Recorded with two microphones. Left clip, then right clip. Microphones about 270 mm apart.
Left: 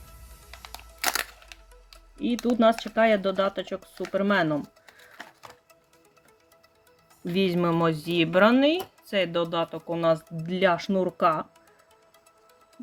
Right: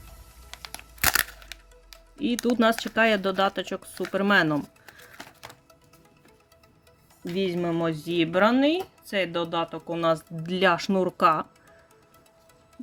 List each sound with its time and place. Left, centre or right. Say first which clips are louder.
1.0 s music: right 4 dB; centre
2.6 s speech: left 2 dB; centre
7.3 s speech: left 2 dB; centre